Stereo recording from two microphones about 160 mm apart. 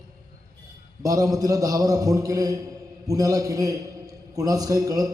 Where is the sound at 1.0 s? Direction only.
20° right (ahead or behind).